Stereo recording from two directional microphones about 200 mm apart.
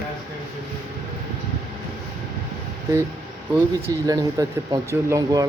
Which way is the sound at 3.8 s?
15° right (ahead or behind).